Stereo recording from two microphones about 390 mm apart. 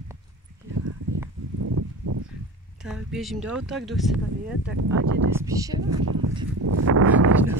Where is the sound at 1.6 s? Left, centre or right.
Right.